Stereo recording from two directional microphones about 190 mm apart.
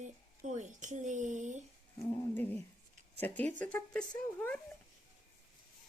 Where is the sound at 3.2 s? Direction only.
10° left (ahead or behind).